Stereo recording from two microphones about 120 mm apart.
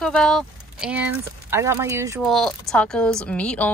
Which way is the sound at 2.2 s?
Centre (ahead or behind).